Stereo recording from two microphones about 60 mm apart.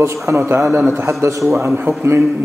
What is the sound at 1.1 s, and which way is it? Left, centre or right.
Speech, right.